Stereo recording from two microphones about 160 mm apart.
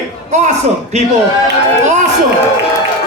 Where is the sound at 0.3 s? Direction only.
50° right (ahead or behind).